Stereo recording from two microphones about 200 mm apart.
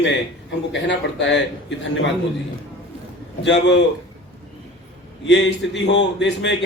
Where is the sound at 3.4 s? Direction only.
60° left (ahead or behind).